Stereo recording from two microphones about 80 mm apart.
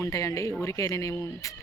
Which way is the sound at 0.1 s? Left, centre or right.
Left.